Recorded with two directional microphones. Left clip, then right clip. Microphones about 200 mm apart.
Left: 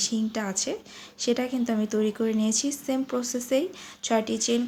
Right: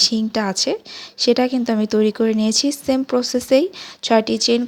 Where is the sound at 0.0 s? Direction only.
40° right (ahead or behind).